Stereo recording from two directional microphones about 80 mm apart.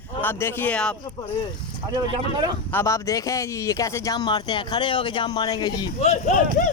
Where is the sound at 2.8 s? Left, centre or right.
Left.